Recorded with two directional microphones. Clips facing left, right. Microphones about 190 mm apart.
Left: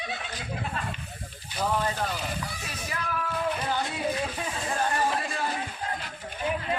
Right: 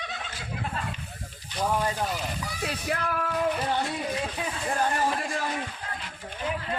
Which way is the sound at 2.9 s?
60° right (ahead or behind).